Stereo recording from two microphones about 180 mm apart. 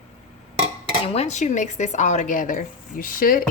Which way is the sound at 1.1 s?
40° left (ahead or behind).